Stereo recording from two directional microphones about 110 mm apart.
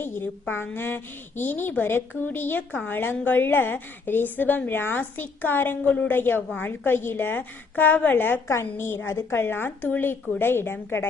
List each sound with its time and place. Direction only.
0.0 s a woman's voice: 20° left (ahead or behind)